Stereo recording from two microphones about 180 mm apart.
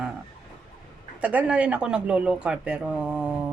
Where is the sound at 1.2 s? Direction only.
10° right (ahead or behind).